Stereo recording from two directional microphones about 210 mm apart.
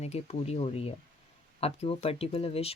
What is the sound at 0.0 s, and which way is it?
Speech, 30° left (ahead or behind).